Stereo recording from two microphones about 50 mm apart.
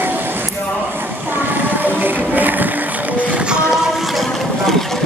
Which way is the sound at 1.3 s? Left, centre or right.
Right.